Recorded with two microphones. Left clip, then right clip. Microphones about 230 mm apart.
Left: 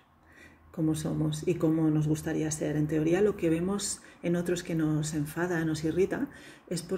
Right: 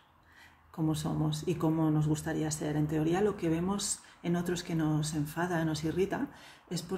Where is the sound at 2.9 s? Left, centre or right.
Centre.